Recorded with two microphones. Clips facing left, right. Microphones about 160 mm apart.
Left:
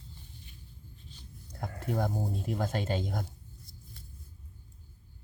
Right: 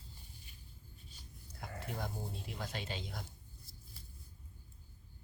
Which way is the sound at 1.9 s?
50° left (ahead or behind).